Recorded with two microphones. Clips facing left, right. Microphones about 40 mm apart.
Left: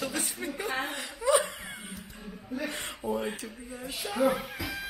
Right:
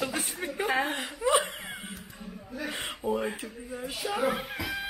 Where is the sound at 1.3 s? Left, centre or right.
Centre.